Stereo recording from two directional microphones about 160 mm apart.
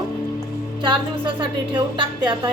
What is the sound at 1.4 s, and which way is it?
A woman's voice, 30° right (ahead or behind).